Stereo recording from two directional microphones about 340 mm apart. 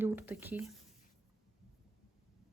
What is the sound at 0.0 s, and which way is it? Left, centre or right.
Speech, centre.